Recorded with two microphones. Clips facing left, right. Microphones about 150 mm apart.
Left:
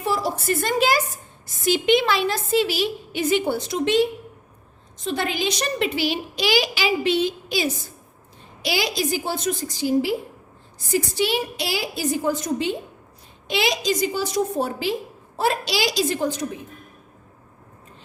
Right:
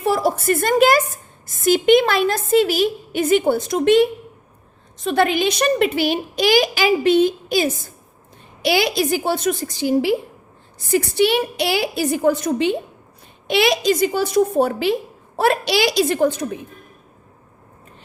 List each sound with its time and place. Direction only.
0.0 s a woman's voice: 55° right (ahead or behind)
8.6 s a woman's voice: 60° right (ahead or behind)